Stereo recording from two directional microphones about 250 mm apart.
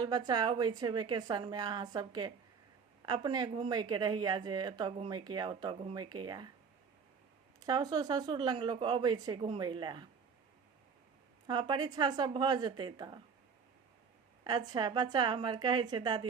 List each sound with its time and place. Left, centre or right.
0.0 s speech: centre
7.6 s speech: centre
11.4 s speech: centre
14.4 s speech: centre